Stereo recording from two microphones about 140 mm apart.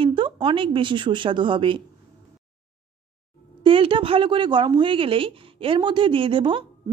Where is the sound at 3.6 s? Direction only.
40° right (ahead or behind).